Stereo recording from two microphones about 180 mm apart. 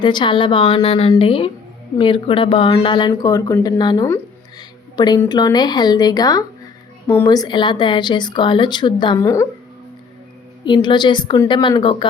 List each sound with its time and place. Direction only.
0.0 s a woman's voice: 25° left (ahead or behind)
10.6 s speech: 25° left (ahead or behind)